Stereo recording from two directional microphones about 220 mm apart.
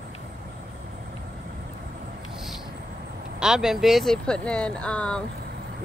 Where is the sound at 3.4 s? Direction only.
Centre (ahead or behind).